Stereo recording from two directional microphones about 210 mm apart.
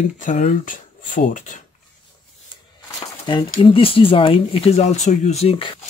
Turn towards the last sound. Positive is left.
turn(degrees=25)  # may be behind; listen again after turning